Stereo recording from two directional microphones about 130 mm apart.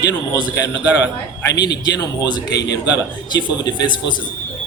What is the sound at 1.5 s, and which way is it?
A man's voice, 30° left (ahead or behind).